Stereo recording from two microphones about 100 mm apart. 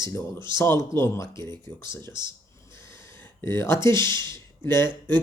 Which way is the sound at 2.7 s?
25° left (ahead or behind).